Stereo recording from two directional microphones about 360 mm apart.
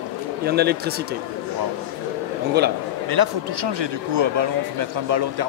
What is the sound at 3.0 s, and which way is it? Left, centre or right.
Speech, right.